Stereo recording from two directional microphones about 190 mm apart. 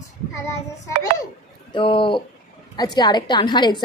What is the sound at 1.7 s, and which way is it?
A woman's voice, 25° left (ahead or behind).